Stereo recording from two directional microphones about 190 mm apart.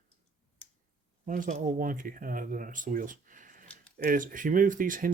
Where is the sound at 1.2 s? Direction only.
45° right (ahead or behind).